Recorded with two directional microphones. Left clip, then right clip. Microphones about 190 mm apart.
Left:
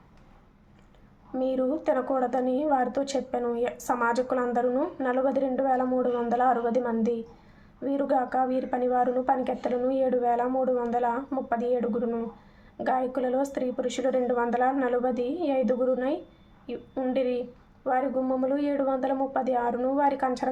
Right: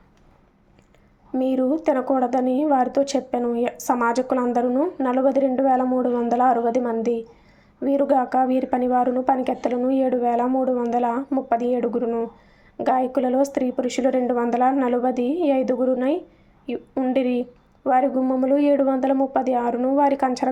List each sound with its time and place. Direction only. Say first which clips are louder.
1.3 s speech: right 5 dB; 30° right (ahead or behind)